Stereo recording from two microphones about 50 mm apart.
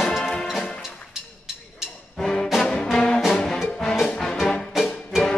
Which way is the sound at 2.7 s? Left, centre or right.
Centre.